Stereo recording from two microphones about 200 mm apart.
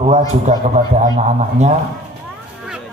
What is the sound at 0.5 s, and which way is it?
Speech, 35° right (ahead or behind).